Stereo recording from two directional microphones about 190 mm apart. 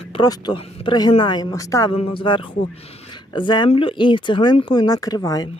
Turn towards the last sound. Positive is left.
turn(degrees=20)  # may be behind; listen again after turning